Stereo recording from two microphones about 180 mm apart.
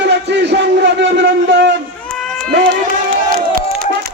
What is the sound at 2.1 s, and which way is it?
Run, 5° left (ahead or behind).